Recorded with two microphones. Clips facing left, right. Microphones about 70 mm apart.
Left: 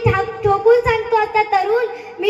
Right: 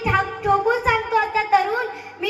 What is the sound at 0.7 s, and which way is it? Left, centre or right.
Speech, centre.